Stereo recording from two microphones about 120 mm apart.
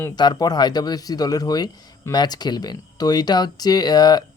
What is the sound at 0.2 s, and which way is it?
Speech, 35° left (ahead or behind).